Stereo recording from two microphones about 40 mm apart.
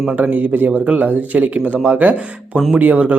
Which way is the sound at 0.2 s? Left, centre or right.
Right.